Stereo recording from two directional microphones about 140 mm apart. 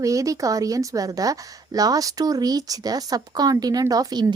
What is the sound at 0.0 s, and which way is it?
A woman's voice, 25° right (ahead or behind).